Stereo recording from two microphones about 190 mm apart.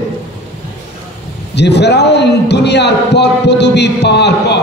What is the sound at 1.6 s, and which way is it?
A man's voice, 60° left (ahead or behind).